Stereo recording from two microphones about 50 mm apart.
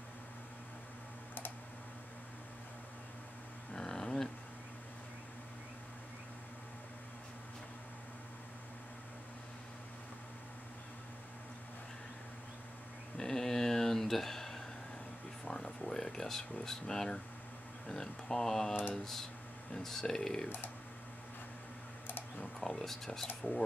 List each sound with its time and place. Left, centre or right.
3.7 s a sound: centre
13.2 s a sound: centre
15.4 s air conditioning: centre
17.8 s speech: centre
19.7 s speech: centre
20.4 s speech: left
22.6 s speech: centre